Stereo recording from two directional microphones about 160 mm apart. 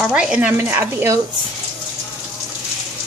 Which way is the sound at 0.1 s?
5° right (ahead or behind).